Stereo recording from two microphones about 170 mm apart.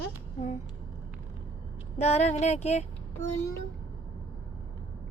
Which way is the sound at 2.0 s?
40° left (ahead or behind).